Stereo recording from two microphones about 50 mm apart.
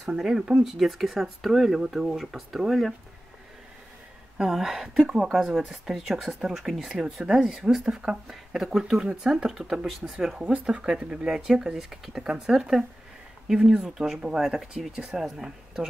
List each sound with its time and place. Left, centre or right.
0.0 s speech: centre
0.7 s speech: centre
4.4 s speech: centre
9.3 s speech: centre
10.4 s speech: right
10.8 s speech: centre